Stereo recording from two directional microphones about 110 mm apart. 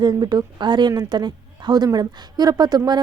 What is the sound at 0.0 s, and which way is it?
A woman's voice, 40° right (ahead or behind).